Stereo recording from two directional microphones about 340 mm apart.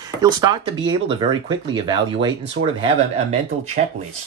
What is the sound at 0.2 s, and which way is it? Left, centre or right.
Speech, centre.